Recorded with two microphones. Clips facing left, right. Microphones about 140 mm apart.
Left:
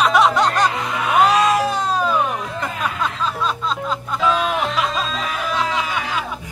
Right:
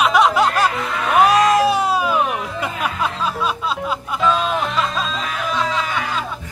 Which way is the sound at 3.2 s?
10° right (ahead or behind).